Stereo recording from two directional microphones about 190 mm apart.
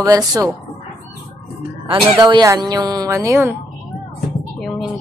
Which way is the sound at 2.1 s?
20° right (ahead or behind).